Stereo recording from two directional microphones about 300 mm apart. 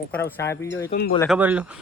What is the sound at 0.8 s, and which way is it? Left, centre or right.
Speech, left.